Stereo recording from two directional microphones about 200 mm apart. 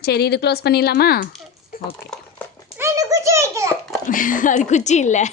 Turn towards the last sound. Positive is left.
turn(degrees=35)  # may be behind; listen again after turning